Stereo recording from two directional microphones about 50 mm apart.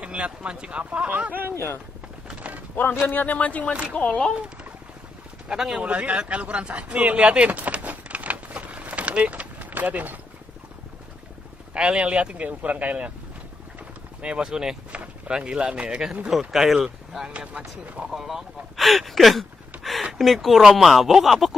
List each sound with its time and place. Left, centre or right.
0.0 s speech: right
2.7 s speech: left; by 4.3 s centre
5.5 s speech: centre
5.8 s a sound: right
11.7 s speech: right
14.2 s speech: centre
16.3 s speech: centre
17.3 s speech: right
18.1 s speech: centre